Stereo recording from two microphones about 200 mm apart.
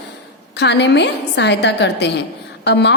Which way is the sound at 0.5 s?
55° left (ahead or behind).